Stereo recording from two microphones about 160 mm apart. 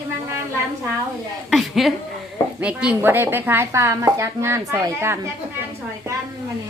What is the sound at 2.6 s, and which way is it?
A woman's voice, 5° right (ahead or behind).